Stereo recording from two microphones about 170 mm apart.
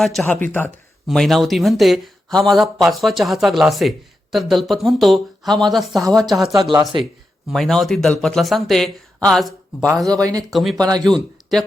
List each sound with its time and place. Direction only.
0.0 s speech: 5° left (ahead or behind)
5.9 s speech: 20° right (ahead or behind)
6.3 s speech: centre (ahead or behind)
10.1 s speech: 20° right (ahead or behind)
10.5 s speech: centre (ahead or behind)
10.8 s speech: 20° right (ahead or behind)
11.0 s a man's voice: centre (ahead or behind)